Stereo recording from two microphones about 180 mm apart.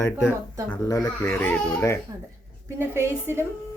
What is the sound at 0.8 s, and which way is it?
Speech, 20° left (ahead or behind).